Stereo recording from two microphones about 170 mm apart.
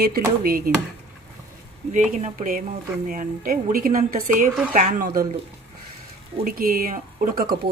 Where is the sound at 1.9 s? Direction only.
45° right (ahead or behind).